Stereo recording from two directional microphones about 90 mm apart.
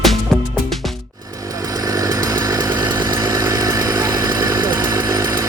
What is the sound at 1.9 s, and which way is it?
Chainsaw, 40° right (ahead or behind).